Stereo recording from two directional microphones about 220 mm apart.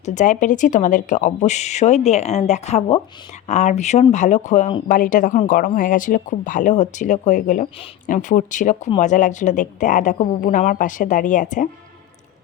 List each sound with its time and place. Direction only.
0.0 s speech: 35° left (ahead or behind)